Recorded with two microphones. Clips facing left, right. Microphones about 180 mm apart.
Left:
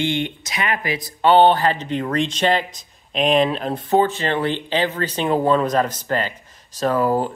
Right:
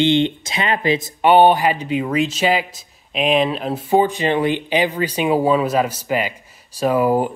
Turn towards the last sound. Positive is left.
turn(degrees=-15)  # may be behind; listen again after turning